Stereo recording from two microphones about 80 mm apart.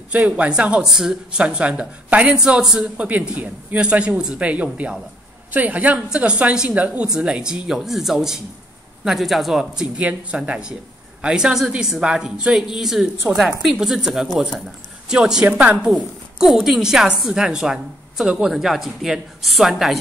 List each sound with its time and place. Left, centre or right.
0.1 s speech: centre
3.1 s a woman's voice: centre
15.9 s a woman's voice: centre